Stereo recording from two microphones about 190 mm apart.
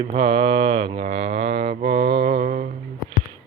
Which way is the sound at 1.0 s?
30° right (ahead or behind).